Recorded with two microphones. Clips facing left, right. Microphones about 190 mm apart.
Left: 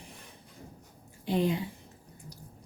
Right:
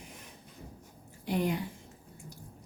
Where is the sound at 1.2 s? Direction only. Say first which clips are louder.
Left 3 dB; 25° left (ahead or behind).